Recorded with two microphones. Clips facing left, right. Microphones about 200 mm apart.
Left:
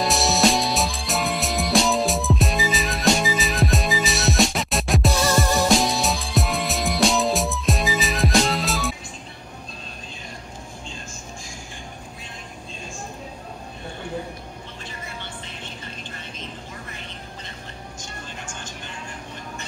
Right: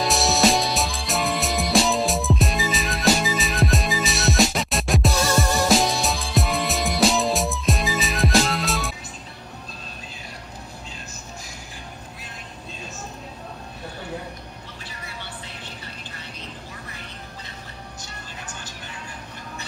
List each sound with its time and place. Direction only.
0.0 s music: centre (ahead or behind)